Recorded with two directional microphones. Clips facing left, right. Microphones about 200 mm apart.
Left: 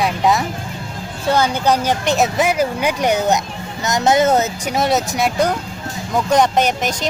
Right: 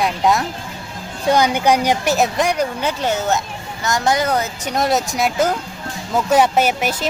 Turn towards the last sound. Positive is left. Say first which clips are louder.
# even
turn(degrees=-5)  # may be behind; listen again after turning